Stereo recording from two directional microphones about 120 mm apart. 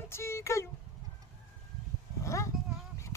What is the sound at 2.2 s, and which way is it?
Dog, 25° left (ahead or behind).